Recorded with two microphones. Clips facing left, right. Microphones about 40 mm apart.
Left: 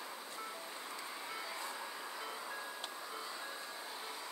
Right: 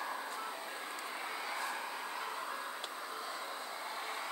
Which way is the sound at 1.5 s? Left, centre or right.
Right.